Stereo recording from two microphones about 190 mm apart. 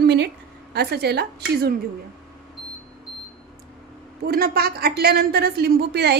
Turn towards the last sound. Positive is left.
turn(degrees=-60)  # may be behind; listen again after turning